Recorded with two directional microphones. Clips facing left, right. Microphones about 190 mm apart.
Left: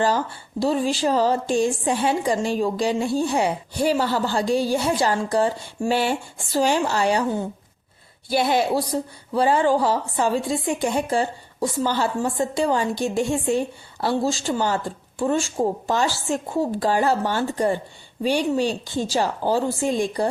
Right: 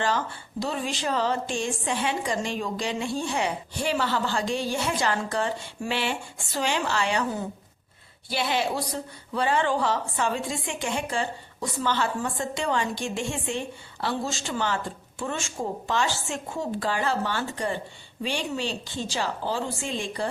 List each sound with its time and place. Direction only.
0.6 s a woman's voice: 35° left (ahead or behind)